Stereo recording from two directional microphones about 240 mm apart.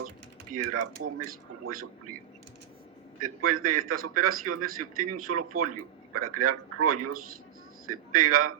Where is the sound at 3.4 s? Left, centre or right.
Right.